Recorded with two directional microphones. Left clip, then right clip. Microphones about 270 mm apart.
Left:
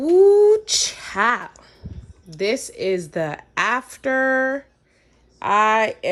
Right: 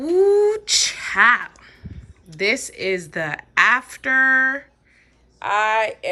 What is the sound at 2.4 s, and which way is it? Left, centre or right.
A woman's voice, centre.